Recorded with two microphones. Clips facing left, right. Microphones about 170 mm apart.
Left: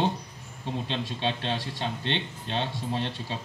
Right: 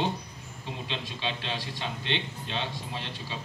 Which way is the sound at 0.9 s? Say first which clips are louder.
Left 4 dB; 50° left (ahead or behind).